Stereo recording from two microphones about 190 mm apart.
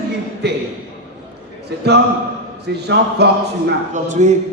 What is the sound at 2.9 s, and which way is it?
Speech, 60° right (ahead or behind).